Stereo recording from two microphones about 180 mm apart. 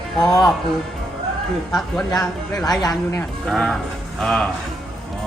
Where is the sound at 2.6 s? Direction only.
20° left (ahead or behind).